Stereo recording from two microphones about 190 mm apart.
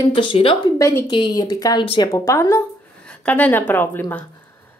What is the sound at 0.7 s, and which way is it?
Speech, 15° left (ahead or behind).